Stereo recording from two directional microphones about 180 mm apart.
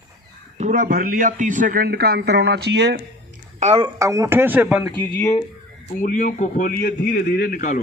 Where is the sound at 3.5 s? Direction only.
35° right (ahead or behind).